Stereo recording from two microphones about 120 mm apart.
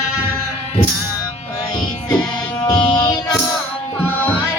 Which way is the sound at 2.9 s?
35° left (ahead or behind).